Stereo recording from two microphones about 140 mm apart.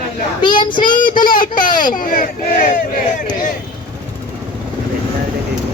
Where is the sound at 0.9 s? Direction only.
75° left (ahead or behind).